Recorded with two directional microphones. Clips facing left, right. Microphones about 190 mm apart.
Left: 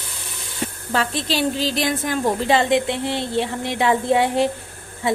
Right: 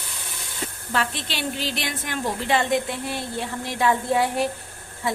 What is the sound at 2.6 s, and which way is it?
Speech, 25° left (ahead or behind).